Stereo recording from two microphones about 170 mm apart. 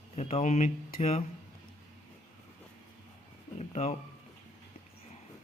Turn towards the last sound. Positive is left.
turn(degrees=40)  # may be behind; listen again after turning